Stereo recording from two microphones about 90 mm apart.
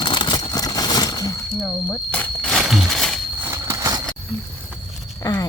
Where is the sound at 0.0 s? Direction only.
60° left (ahead or behind).